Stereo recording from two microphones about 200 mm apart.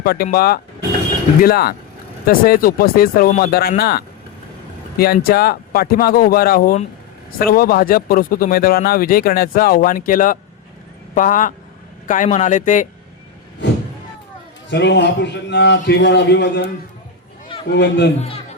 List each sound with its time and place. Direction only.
0.0 s a man's voice: 50° left (ahead or behind)
14.7 s a man's voice: 60° left (ahead or behind)
17.7 s a man's voice: 60° left (ahead or behind)
18.2 s speech: 30° left (ahead or behind)